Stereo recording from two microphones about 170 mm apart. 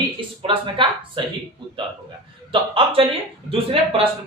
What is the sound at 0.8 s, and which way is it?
Speech, 30° right (ahead or behind).